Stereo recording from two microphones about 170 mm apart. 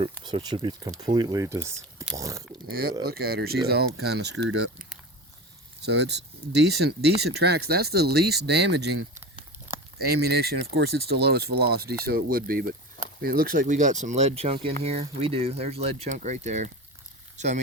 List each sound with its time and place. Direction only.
0.0 s speech: 30° right (ahead or behind)
2.6 s speech: 60° right (ahead or behind); by 4.5 s 85° right
5.8 s speech: 90° right
10.0 s speech: 70° right (ahead or behind); by 17.6 s 45° right (ahead or behind)